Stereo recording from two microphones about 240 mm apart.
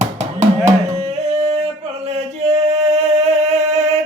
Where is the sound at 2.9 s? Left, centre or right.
Right.